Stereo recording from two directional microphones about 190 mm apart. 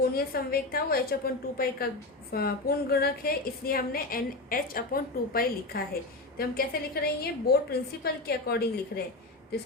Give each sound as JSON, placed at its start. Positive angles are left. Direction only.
{"t": 0.1, "sound": "a woman's voice", "side_deg": 50}